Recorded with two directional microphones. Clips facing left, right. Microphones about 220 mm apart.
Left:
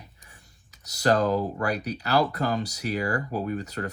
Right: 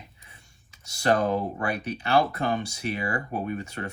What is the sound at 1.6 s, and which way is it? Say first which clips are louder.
Speech: left 1 dB; 25° right (ahead or behind).